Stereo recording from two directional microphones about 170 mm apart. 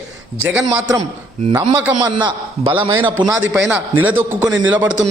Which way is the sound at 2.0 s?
25° right (ahead or behind).